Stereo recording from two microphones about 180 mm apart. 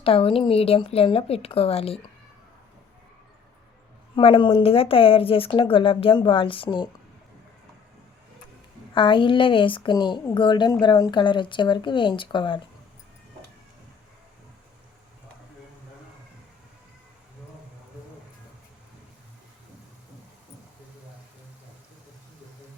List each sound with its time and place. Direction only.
0.0 s speech: 30° left (ahead or behind)
4.1 s a woman's voice: 30° left (ahead or behind)
9.0 s a woman's voice: 25° left (ahead or behind)